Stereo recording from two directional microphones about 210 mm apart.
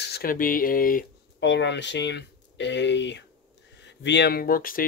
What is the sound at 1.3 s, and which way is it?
Speech, 55° left (ahead or behind).